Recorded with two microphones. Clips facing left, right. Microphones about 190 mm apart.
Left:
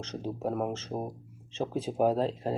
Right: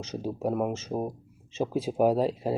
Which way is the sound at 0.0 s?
10° right (ahead or behind).